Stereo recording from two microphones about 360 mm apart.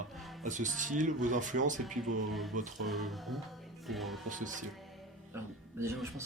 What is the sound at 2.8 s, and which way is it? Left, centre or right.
Speech, centre.